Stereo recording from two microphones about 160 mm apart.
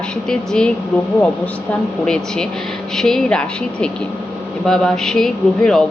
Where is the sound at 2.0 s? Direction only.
5° left (ahead or behind).